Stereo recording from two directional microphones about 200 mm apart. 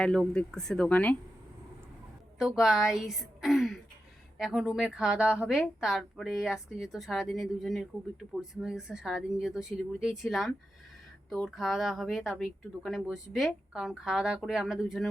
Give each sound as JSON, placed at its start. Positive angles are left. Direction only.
{"t": 0.0, "sound": "speech", "side_deg": 5}
{"t": 2.4, "sound": "a woman's voice", "side_deg": 0}